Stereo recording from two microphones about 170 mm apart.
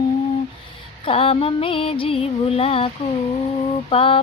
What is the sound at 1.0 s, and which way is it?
Speech, 30° left (ahead or behind).